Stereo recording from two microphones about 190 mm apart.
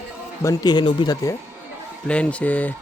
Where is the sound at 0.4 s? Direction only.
20° left (ahead or behind).